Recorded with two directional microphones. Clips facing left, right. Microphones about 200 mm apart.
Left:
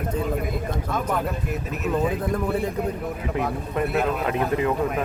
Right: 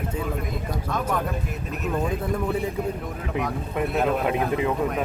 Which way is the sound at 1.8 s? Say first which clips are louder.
Left 2 dB; 5° left (ahead or behind).